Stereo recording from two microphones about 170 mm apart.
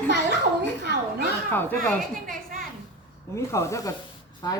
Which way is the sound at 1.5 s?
10° left (ahead or behind).